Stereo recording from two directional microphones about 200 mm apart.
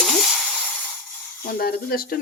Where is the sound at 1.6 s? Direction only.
50° left (ahead or behind).